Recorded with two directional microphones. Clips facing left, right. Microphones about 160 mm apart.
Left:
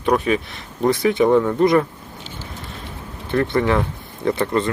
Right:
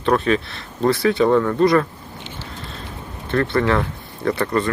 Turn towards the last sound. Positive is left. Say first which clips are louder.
# left 1 dB
turn(degrees=20)  # may be behind; listen again after turning